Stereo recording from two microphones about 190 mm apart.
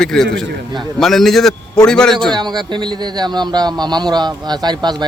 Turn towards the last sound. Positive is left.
turn(degrees=-20)  # may be behind; listen again after turning